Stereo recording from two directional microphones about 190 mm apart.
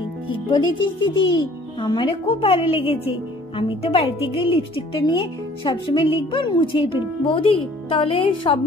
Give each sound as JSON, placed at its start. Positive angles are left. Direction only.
{"t": 0.7, "sound": "a child's voice", "side_deg": 90}
{"t": 1.0, "sound": "a woman's voice", "side_deg": 25}